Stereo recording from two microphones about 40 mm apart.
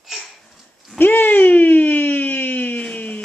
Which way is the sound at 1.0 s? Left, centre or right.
Left.